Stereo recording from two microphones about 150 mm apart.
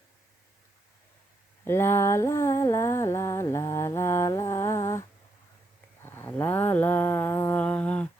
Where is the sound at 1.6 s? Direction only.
15° left (ahead or behind).